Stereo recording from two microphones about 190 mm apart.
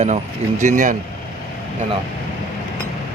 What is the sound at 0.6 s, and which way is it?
Speech, 40° right (ahead or behind).